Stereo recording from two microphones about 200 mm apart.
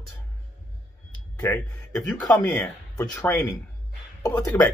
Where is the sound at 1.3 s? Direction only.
10° left (ahead or behind).